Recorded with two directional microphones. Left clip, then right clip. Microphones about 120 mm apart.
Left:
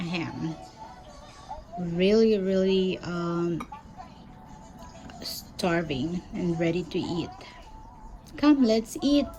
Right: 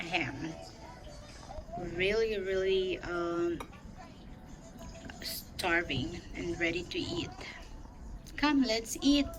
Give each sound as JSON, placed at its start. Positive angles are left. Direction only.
{"t": 0.0, "sound": "a sound", "side_deg": 20}
{"t": 2.0, "sound": "speech", "side_deg": 20}
{"t": 5.0, "sound": "a woman's voice", "side_deg": 20}